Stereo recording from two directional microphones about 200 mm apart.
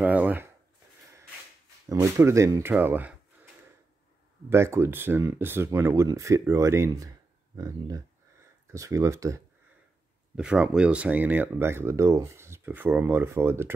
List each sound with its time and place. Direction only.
0.0 s speech: 10° right (ahead or behind)
1.9 s speech: 15° right (ahead or behind)
4.5 s speech: 10° right (ahead or behind)
10.3 s speech: 5° right (ahead or behind)